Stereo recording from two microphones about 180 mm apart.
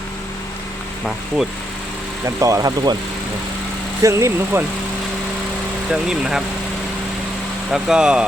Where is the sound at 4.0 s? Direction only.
15° right (ahead or behind).